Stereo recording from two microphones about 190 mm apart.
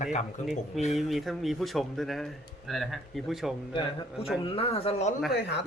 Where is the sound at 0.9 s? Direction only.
Centre (ahead or behind).